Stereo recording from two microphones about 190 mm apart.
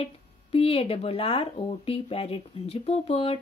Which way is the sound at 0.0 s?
30° left (ahead or behind).